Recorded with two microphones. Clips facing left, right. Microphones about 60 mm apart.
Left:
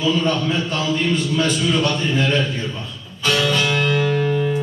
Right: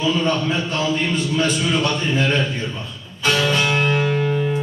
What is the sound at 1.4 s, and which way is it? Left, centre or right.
A man's voice, right.